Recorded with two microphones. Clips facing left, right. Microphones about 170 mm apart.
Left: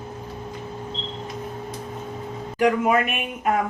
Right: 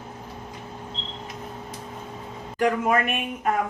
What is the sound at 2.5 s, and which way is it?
Speech, 10° left (ahead or behind).